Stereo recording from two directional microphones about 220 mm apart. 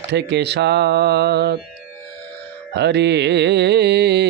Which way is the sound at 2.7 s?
50° right (ahead or behind).